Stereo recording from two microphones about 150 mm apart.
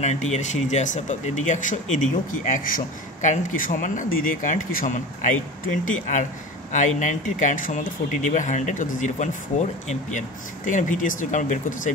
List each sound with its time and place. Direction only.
0.0 s speech: 50° left (ahead or behind)